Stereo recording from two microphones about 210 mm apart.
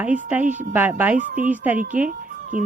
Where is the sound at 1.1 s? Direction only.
40° right (ahead or behind).